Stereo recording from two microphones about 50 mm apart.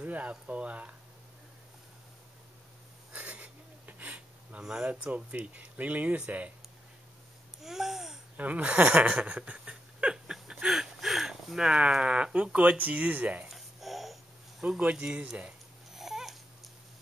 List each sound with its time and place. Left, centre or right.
0.0 s speech: right
3.1 s a sound: right
4.6 s speech: centre
7.6 s babbling: centre
8.4 s speech: right
10.1 s speech: centre; by 13.5 s right
13.5 s a sound: centre
14.8 s speech: right
15.9 s babbling: centre